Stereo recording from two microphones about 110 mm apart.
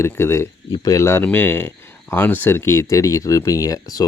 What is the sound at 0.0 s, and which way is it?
Speech, 25° left (ahead or behind).